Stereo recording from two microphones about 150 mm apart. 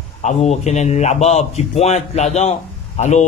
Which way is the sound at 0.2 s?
50° left (ahead or behind).